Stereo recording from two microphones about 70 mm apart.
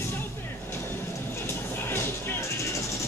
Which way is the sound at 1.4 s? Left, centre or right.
Left.